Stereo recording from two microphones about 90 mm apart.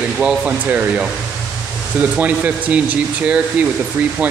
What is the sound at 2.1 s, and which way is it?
Speech, 20° right (ahead or behind).